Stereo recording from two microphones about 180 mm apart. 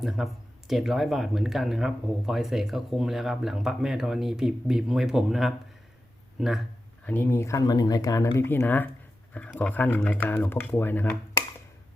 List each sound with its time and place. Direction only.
0.0 s speech: centre (ahead or behind)
7.0 s speech: 10° left (ahead or behind)